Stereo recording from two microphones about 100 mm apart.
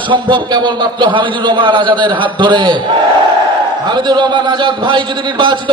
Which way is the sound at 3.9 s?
50° right (ahead or behind).